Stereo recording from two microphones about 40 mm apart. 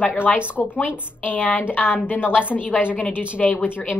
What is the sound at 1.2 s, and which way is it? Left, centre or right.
A woman's voice, left.